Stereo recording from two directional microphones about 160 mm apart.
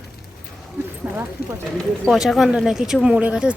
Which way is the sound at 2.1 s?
Centre (ahead or behind).